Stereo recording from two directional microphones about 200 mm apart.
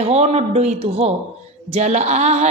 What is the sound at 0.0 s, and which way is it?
A woman's voice, 30° right (ahead or behind).